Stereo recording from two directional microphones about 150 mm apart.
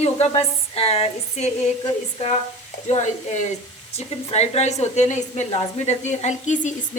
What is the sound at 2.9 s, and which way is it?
A woman's voice, 50° left (ahead or behind).